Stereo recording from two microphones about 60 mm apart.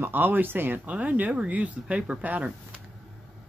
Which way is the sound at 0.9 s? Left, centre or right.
Right.